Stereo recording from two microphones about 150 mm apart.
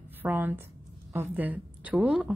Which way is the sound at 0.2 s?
15° right (ahead or behind).